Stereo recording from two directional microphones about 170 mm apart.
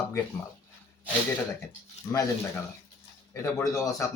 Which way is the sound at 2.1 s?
20° left (ahead or behind).